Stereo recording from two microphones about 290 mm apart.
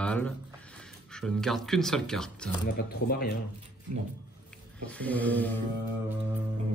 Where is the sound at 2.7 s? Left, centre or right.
Left.